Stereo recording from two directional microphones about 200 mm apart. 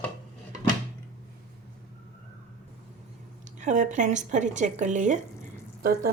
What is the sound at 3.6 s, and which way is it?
Speech, 40° right (ahead or behind).